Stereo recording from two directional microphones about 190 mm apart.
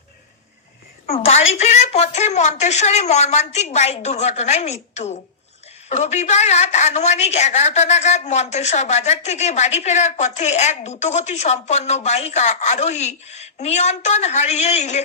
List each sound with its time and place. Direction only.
1.5 s a woman's voice: 35° left (ahead or behind)